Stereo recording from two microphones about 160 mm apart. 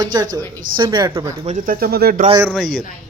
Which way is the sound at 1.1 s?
15° right (ahead or behind).